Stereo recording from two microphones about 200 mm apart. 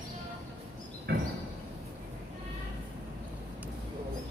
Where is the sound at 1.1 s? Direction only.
55° right (ahead or behind).